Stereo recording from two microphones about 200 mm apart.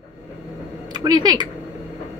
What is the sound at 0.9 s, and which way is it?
Speech, 20° right (ahead or behind).